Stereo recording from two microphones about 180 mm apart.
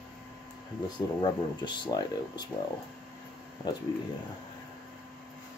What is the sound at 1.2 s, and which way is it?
Speech, 25° left (ahead or behind).